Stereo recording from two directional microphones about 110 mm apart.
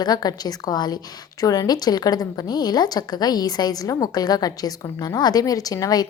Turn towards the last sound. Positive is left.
turn(degrees=35)  # may be behind; listen again after turning